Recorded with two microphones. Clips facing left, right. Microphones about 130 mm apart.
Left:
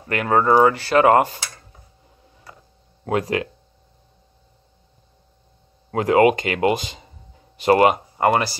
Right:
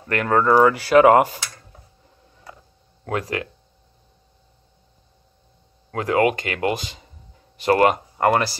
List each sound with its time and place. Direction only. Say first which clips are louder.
0.1 s speech: even; 10° left (ahead or behind)
0.7 s speech: right 2 dB; 5° right (ahead or behind)
3.1 s speech: left 4 dB; 20° left (ahead or behind)
5.9 s speech: left 4 dB; 20° left (ahead or behind); by 8.5 s 5° left (ahead or behind)